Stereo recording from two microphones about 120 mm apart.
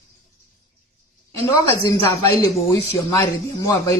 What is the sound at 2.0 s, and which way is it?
Speech, 25° left (ahead or behind).